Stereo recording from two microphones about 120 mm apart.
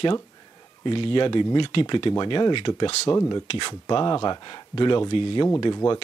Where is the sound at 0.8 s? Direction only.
50° left (ahead or behind).